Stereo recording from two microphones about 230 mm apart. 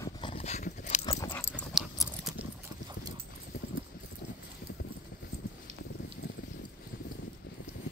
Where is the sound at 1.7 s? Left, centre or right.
Centre.